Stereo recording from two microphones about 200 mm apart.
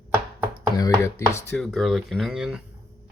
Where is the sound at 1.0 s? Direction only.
15° left (ahead or behind).